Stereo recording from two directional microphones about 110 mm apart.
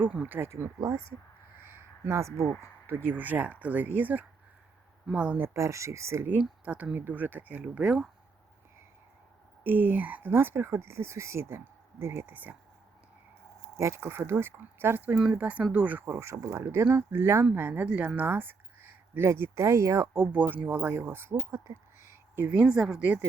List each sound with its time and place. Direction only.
0.0 s speech: 15° right (ahead or behind)
1.5 s a sound: 20° right (ahead or behind)
2.8 s a woman's voice: 20° right (ahead or behind)
5.5 s speech: 25° right (ahead or behind)
6.4 s a woman's voice: 10° right (ahead or behind)
9.6 s speech: 15° right (ahead or behind)
13.7 s a woman's voice: 25° right (ahead or behind)
16.0 s a woman's voice: 25° right (ahead or behind)
22.0 s a sound: 20° right (ahead or behind)
22.6 s a woman's voice: 5° right (ahead or behind)